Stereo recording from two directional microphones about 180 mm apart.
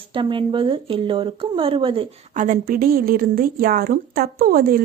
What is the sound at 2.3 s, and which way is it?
A woman's voice, 45° right (ahead or behind).